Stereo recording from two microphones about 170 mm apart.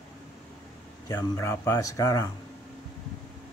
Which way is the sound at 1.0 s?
20° left (ahead or behind).